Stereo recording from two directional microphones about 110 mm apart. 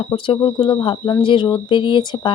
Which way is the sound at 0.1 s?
50° left (ahead or behind).